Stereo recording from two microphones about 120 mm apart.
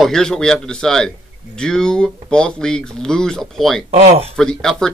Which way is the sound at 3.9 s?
65° right (ahead or behind).